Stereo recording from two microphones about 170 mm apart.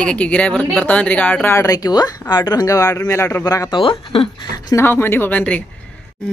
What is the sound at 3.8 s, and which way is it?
Speech, 30° left (ahead or behind).